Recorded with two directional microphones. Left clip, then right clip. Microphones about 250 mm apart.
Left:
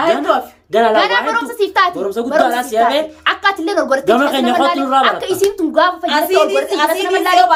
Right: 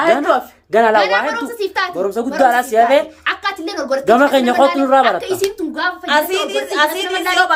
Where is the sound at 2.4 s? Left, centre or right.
Centre.